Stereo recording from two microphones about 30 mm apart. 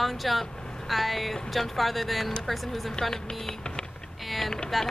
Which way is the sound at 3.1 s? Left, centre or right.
Left.